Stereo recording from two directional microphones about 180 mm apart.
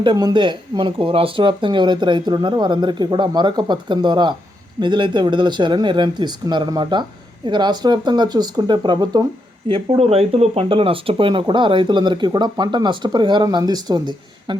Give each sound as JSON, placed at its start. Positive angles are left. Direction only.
{"t": 0.0, "sound": "speech", "side_deg": -25}